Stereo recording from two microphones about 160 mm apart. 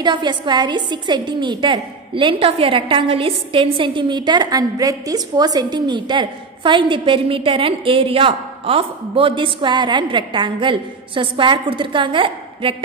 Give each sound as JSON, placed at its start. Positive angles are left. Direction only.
{"t": 0.0, "sound": "a woman's voice", "side_deg": -30}